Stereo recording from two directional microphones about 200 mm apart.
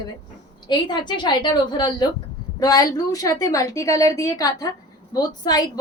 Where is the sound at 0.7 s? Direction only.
20° left (ahead or behind).